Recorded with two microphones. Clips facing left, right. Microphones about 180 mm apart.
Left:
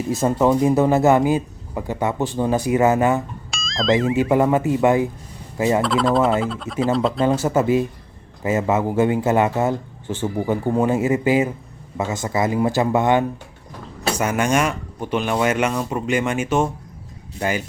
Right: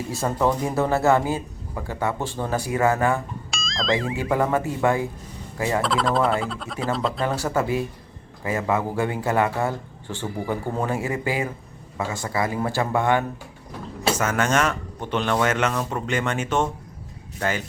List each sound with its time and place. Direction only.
0.1 s speech: 20° left (ahead or behind)
3.5 s music: centre (ahead or behind)
4.2 s speech: 20° left (ahead or behind)
5.8 s speech: centre (ahead or behind)
7.2 s speech: 20° left (ahead or behind)